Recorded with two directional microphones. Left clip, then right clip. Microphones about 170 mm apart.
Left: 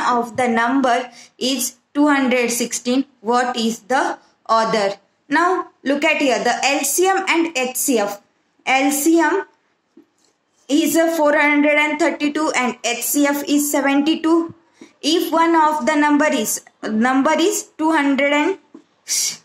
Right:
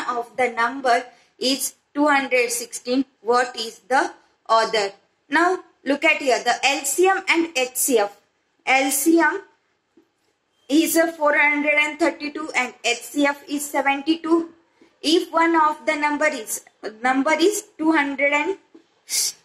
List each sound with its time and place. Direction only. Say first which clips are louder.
0.0 s speech: left 5 dB; 35° left (ahead or behind)
10.7 s speech: left 2 dB; 35° left (ahead or behind)